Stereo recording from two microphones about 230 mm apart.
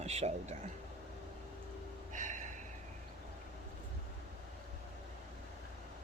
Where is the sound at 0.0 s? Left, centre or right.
Right.